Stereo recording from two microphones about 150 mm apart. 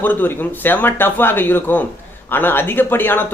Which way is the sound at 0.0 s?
10° left (ahead or behind).